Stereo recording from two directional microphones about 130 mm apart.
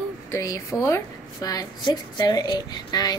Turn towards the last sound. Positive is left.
turn(degrees=30)  # may be behind; listen again after turning